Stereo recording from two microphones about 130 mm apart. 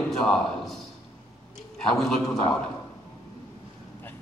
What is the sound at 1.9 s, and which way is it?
Speech, 5° left (ahead or behind).